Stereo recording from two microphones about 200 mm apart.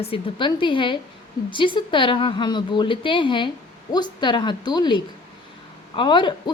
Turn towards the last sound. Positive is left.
turn(degrees=25)  # may be behind; listen again after turning